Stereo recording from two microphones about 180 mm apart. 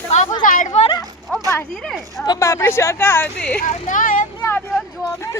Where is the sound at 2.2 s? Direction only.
20° left (ahead or behind).